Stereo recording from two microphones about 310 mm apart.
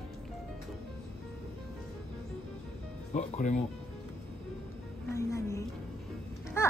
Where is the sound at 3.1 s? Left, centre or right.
Left.